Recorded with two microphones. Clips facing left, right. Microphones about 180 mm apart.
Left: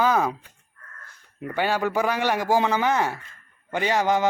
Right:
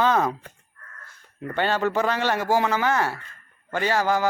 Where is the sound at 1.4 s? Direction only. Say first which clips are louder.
Right 1 dB; 10° left (ahead or behind).